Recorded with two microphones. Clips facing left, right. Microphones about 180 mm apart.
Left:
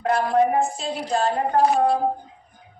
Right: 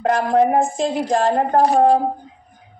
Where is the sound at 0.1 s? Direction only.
45° right (ahead or behind).